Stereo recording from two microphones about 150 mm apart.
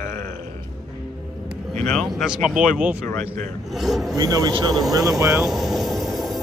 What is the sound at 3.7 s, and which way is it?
Speech, centre (ahead or behind).